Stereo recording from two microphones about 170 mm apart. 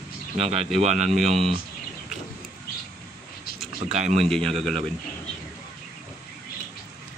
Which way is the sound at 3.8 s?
45° right (ahead or behind).